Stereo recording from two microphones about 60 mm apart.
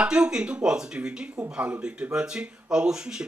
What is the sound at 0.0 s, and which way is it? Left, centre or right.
Speech, centre.